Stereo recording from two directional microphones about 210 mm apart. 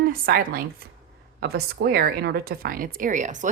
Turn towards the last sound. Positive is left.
turn(degrees=-35)  # may be behind; listen again after turning